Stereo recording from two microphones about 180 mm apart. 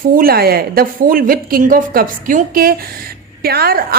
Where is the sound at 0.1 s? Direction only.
55° right (ahead or behind).